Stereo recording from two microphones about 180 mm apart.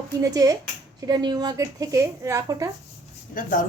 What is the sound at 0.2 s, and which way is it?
Speech, 20° right (ahead or behind).